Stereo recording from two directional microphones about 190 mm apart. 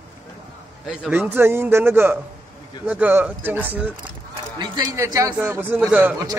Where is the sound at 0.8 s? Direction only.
5° right (ahead or behind).